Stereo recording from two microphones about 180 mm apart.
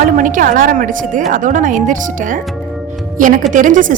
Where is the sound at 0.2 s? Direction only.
45° right (ahead or behind).